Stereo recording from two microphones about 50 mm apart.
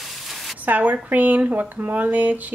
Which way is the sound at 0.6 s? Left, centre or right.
Right.